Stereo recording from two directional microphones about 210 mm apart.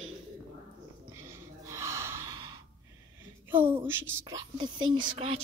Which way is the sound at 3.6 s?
25° right (ahead or behind).